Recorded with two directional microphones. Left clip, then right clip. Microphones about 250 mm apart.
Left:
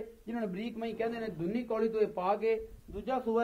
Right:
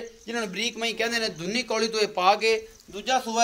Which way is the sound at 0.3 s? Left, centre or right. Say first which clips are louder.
Right 10 dB; right.